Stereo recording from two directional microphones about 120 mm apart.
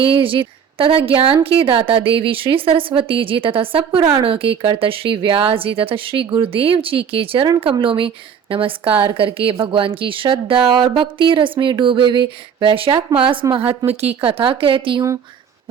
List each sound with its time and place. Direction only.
0.0 s a woman's voice: 50° right (ahead or behind)